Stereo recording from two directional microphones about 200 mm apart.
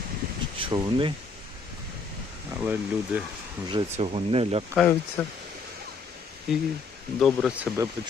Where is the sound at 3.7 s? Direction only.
25° right (ahead or behind).